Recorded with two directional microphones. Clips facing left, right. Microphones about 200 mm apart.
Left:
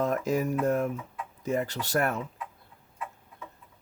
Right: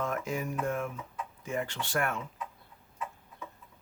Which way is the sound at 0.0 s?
35° left (ahead or behind).